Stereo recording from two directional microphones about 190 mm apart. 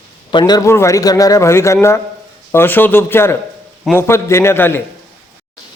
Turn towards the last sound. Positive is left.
turn(degrees=10)  # may be behind; listen again after turning